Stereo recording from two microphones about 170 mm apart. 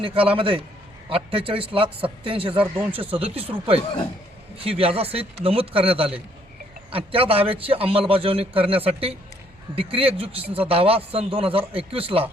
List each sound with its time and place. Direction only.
0.0 s a man's voice: 30° right (ahead or behind)